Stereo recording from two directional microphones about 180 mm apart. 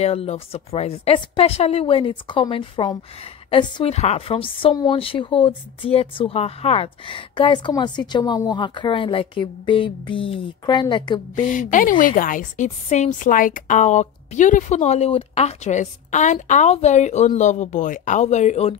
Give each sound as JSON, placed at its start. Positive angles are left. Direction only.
{"t": 0.0, "sound": "a woman's voice", "side_deg": 35}
{"t": 11.4, "sound": "a woman's voice", "side_deg": 45}